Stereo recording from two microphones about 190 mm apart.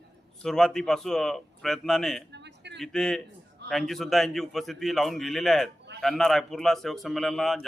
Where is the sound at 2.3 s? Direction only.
65° right (ahead or behind).